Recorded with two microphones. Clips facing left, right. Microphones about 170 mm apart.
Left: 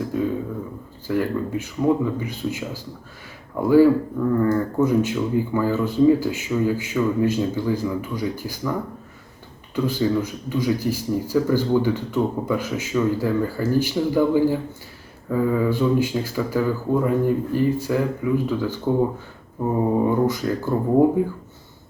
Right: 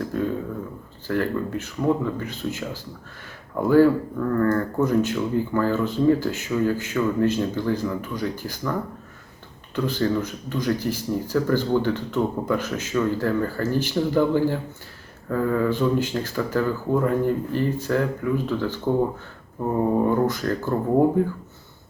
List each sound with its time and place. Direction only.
0.0 s speech: 10° left (ahead or behind)
9.7 s speech: 10° left (ahead or behind)